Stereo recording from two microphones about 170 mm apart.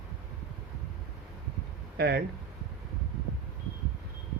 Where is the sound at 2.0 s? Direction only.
70° right (ahead or behind).